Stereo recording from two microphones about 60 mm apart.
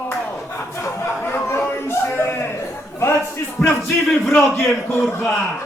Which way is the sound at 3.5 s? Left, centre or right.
Centre.